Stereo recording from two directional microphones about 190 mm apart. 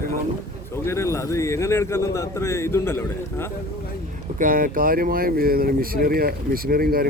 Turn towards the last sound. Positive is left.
turn(degrees=-50)  # may be behind; listen again after turning